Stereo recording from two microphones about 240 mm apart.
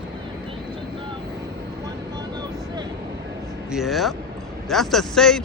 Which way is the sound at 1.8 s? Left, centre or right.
Centre.